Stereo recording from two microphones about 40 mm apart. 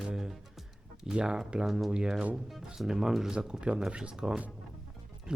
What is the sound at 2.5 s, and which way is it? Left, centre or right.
Speech, centre.